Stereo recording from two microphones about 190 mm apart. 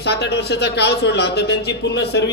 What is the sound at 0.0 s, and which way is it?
Speech, 60° left (ahead or behind).